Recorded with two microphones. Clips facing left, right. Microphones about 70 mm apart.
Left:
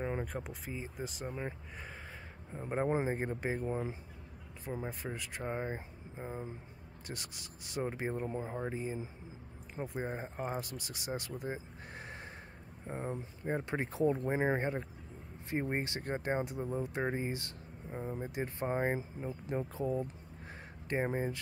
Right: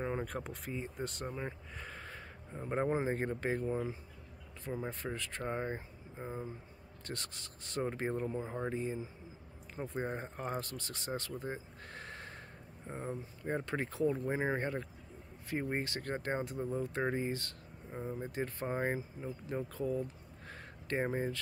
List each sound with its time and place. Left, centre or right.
0.0 s speech: centre; by 8.5 s left
8.6 s speech: centre
10.0 s speech: centre; by 20.5 s left
20.9 s speech: centre